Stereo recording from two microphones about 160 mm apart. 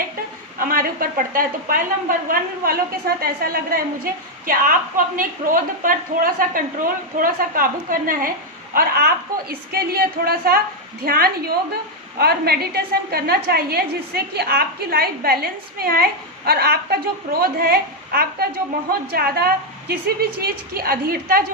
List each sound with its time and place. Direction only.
0.7 s a woman's voice: 65° right (ahead or behind)
16.5 s a woman's voice: 80° right